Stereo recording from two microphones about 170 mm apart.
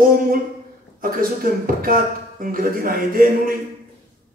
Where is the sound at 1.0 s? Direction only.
55° right (ahead or behind).